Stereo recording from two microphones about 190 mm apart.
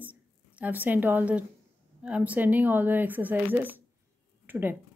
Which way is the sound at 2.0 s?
5° right (ahead or behind).